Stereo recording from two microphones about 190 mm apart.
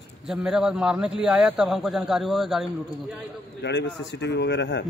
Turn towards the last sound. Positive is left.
turn(degrees=65)  # may be behind; listen again after turning